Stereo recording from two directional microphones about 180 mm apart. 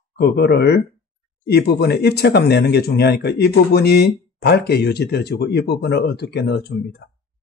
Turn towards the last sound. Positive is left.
turn(degrees=65)  # may be behind; listen again after turning